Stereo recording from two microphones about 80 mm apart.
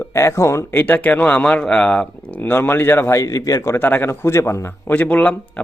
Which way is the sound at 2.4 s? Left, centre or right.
Left.